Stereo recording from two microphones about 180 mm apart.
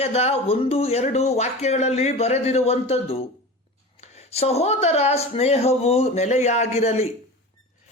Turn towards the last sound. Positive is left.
turn(degrees=35)  # may be behind; listen again after turning